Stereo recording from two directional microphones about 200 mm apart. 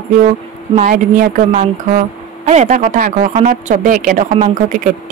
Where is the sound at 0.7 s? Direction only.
40° right (ahead or behind).